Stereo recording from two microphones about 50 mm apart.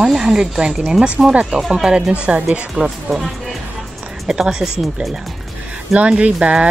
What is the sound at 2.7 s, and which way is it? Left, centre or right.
Speech, centre.